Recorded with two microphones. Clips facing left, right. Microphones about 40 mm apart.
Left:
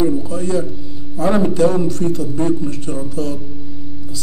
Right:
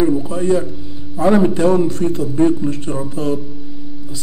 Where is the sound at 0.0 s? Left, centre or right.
Right.